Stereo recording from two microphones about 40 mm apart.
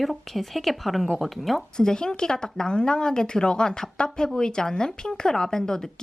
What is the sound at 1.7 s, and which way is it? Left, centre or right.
Speech, centre.